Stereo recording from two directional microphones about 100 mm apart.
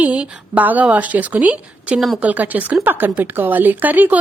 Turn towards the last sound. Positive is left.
turn(degrees=-15)  # may be behind; listen again after turning